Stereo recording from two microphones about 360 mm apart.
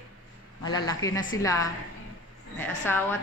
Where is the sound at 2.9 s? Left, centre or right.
Centre.